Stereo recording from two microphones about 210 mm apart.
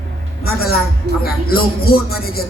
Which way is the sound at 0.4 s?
45° left (ahead or behind).